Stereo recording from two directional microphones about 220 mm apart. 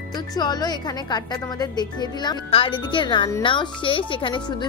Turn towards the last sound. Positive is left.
turn(degrees=20)  # may be behind; listen again after turning